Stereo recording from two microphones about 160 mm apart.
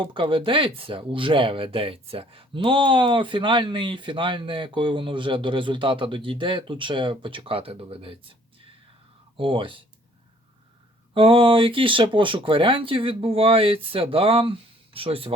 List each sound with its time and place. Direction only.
0.0 s speech: 30° right (ahead or behind)
9.4 s speech: 30° right (ahead or behind)
11.1 s speech: 35° right (ahead or behind)